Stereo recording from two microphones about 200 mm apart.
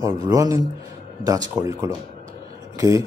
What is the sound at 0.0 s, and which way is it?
Speech, 15° right (ahead or behind).